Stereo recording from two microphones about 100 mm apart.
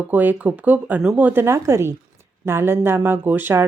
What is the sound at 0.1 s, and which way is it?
A woman's voice, 15° right (ahead or behind).